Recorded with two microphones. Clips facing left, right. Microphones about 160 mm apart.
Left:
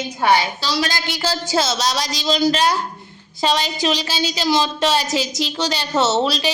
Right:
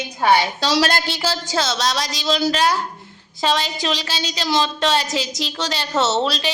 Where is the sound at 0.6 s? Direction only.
75° right (ahead or behind).